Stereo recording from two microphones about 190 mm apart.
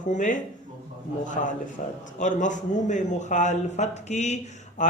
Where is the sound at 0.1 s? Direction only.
40° left (ahead or behind).